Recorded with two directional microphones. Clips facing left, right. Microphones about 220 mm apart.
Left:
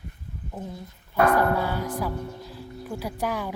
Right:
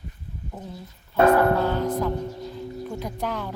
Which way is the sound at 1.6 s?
10° left (ahead or behind).